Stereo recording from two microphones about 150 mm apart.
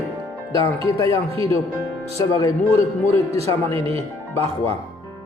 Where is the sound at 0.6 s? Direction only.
20° left (ahead or behind).